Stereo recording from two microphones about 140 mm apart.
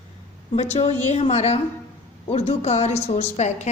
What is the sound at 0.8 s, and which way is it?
A woman's voice, 50° left (ahead or behind).